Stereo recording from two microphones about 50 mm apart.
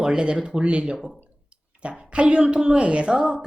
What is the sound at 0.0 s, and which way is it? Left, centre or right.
Speech, centre.